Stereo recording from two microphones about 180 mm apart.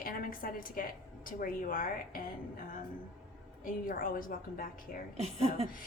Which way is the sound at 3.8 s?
50° left (ahead or behind).